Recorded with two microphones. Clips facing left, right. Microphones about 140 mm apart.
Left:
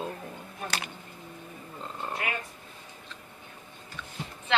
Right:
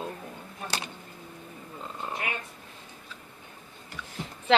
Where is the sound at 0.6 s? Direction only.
30° right (ahead or behind).